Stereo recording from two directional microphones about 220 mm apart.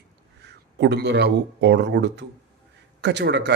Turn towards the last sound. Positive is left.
turn(degrees=-50)  # may be behind; listen again after turning